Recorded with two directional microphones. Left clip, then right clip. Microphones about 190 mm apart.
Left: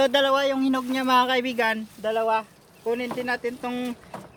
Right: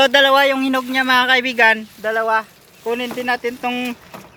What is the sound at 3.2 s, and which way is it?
Speech, 20° right (ahead or behind).